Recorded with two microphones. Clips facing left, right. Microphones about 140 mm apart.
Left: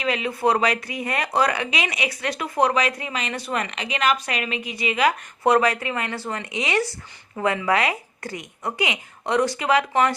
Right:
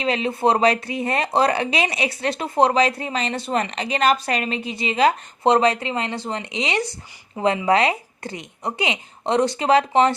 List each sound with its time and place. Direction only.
0.0 s speech: 30° right (ahead or behind)